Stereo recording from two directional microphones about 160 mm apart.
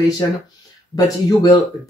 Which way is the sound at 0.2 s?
25° left (ahead or behind).